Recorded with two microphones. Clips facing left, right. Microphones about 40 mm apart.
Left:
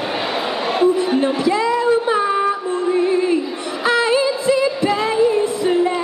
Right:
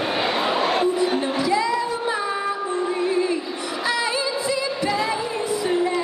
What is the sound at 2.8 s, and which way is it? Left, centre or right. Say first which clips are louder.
Music: left 7 dB; centre.